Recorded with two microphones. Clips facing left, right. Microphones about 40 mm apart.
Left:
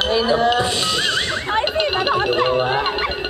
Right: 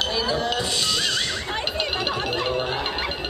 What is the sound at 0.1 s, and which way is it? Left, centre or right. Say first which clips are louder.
Music: left 8 dB; left.